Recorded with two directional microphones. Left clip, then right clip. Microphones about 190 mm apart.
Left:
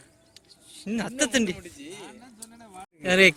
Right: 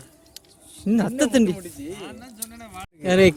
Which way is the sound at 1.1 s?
25° right (ahead or behind).